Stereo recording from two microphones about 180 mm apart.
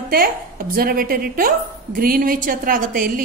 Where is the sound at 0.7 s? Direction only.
55° right (ahead or behind).